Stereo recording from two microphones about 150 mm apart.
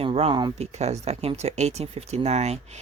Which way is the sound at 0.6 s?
45° right (ahead or behind).